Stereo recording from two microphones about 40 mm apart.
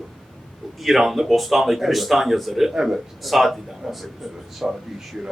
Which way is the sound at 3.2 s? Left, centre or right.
Centre.